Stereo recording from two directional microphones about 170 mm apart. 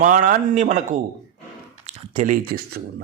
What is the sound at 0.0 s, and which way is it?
Speech, 50° right (ahead or behind).